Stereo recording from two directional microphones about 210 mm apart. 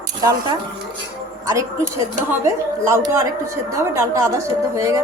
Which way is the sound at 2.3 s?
15° right (ahead or behind).